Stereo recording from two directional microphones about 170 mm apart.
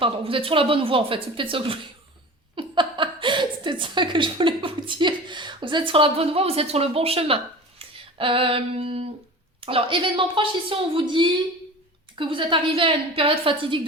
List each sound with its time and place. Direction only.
0.0 s speech: 30° right (ahead or behind)
7.8 s a sound: 30° right (ahead or behind)
9.6 s a woman's voice: 35° right (ahead or behind)